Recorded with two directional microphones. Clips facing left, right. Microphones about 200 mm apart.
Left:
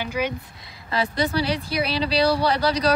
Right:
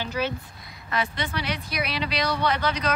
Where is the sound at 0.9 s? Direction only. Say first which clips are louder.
Left 6 dB; 35° left (ahead or behind).